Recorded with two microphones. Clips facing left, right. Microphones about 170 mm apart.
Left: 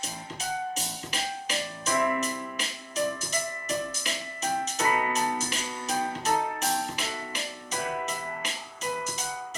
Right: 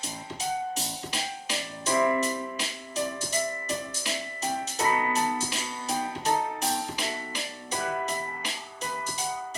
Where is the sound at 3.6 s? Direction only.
35° right (ahead or behind).